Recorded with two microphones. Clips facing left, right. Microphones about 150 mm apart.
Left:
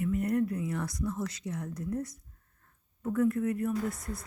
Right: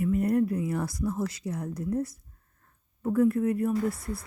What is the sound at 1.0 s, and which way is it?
Speech, 30° right (ahead or behind).